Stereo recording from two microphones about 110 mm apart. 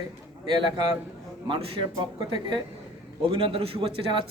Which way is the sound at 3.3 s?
55° right (ahead or behind).